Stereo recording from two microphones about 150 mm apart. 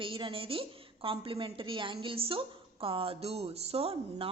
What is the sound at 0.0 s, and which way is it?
A woman's voice, 35° right (ahead or behind).